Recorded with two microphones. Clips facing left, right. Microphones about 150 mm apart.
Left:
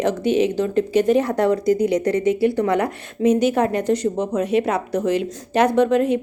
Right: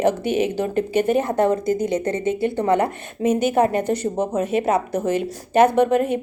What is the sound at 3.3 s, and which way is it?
A woman's voice, 5° right (ahead or behind).